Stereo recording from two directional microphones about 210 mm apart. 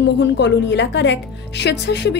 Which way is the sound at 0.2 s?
55° left (ahead or behind).